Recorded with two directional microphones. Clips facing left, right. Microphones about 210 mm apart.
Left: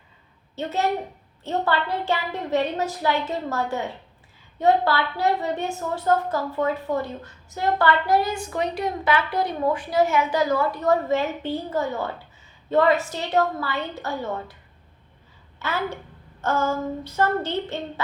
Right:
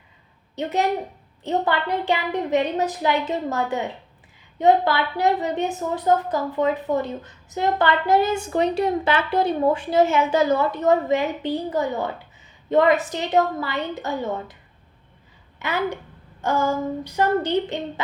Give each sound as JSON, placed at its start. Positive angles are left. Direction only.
{"t": 0.5, "sound": "a woman's voice", "side_deg": -15}
{"t": 15.5, "sound": "a child's voice", "side_deg": -15}